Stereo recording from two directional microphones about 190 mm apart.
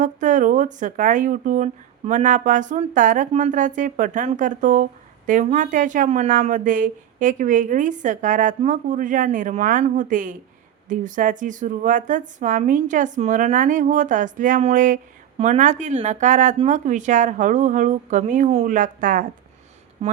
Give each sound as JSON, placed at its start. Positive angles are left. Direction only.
{"t": 0.0, "sound": "speech", "side_deg": -40}
{"t": 20.0, "sound": "speech", "side_deg": -35}